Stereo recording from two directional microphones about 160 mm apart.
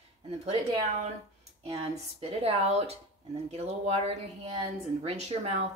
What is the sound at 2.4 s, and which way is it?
Speech, 40° right (ahead or behind).